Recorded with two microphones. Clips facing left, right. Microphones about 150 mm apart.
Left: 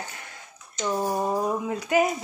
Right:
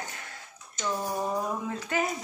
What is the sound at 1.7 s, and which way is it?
Speech, 10° left (ahead or behind).